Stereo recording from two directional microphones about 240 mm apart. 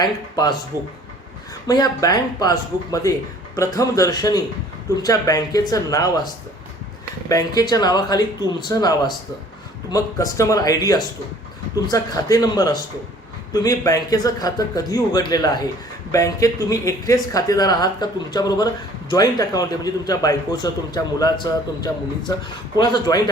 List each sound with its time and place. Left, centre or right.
0.0 s speech: centre
1.6 s speech: centre
22.8 s speech: centre